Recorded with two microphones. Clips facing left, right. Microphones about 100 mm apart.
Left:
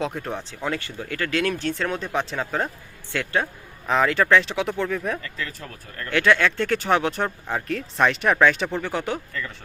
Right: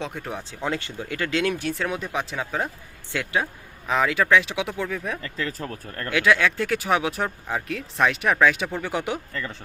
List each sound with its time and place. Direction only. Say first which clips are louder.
0.0 s speech: left 4 dB; centre (ahead or behind)
0.6 s speech: right 2 dB; 20° right (ahead or behind); by 2.6 s 5° right (ahead or behind)
3.1 s speech: left 1 dB; 15° right (ahead or behind)
3.8 s speech: left 2 dB; centre (ahead or behind)
5.2 s speech: right 4 dB; 35° right (ahead or behind)
6.1 s speech: left 1 dB; 5° right (ahead or behind)